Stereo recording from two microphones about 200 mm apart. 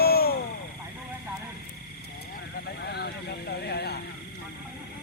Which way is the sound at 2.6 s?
55° left (ahead or behind).